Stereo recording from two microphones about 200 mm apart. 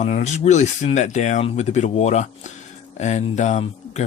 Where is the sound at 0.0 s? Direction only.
35° left (ahead or behind).